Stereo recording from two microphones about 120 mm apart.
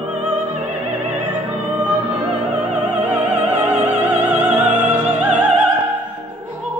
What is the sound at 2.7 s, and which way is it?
Opera, 15° right (ahead or behind).